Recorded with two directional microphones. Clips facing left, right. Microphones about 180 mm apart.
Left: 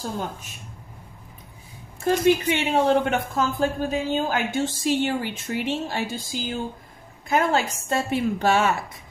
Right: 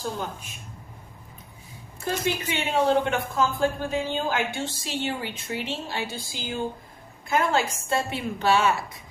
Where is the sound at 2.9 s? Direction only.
45° left (ahead or behind).